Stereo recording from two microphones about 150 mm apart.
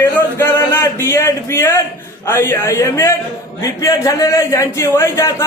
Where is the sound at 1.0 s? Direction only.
20° left (ahead or behind).